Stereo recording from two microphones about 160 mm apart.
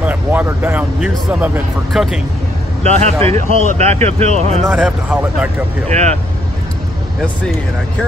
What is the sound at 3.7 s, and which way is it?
Speech, 45° right (ahead or behind).